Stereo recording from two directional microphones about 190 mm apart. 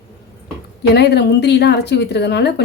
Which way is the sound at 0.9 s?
60° left (ahead or behind).